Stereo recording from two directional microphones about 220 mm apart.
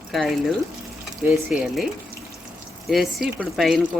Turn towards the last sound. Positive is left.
turn(degrees=0)  # may be behind; listen again after turning